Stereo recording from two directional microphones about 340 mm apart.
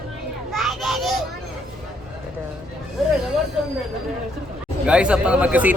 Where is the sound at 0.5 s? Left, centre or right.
Centre.